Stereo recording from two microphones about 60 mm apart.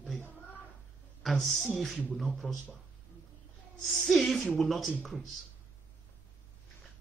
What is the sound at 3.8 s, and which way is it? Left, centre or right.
Speech, centre.